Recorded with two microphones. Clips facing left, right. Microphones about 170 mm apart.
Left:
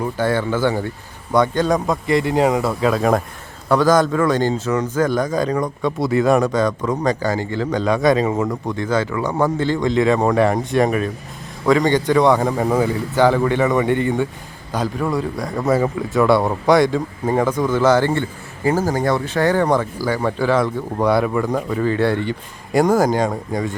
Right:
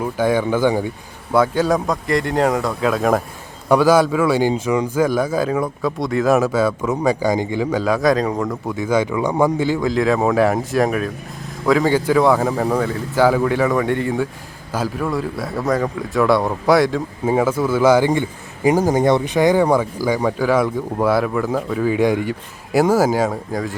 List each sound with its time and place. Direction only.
0.0 s a man's voice: 10° right (ahead or behind)